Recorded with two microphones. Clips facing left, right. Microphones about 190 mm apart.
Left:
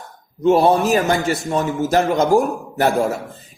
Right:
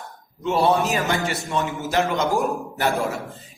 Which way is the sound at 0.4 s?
50° left (ahead or behind).